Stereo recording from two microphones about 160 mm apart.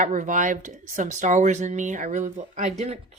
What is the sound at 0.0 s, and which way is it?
A woman's voice, 55° right (ahead or behind).